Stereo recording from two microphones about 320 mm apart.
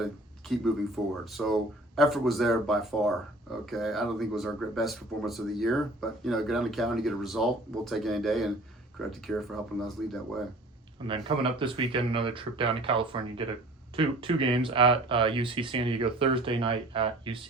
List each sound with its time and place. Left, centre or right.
0.0 s speech: centre
11.0 s speech: centre